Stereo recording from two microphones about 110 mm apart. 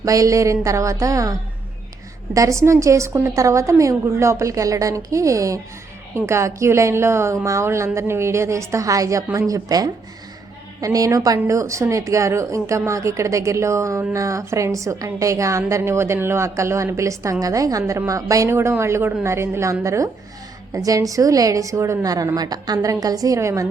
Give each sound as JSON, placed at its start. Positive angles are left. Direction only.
{"t": 0.0, "sound": "a woman's voice", "side_deg": -30}